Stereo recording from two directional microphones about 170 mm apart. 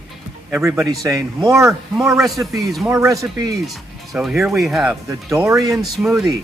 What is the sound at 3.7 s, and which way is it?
Speech, centre (ahead or behind).